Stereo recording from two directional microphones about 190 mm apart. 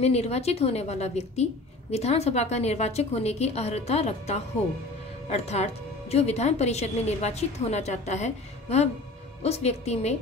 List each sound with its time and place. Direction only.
0.0 s a woman's voice: 35° left (ahead or behind)